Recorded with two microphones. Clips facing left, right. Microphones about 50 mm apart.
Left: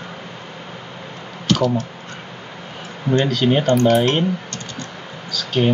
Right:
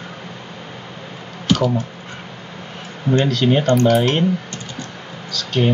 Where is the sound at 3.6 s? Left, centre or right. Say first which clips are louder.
Even; left.